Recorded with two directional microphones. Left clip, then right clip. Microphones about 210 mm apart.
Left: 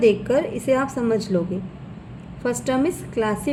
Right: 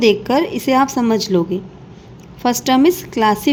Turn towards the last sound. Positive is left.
turn(degrees=-45)  # may be behind; listen again after turning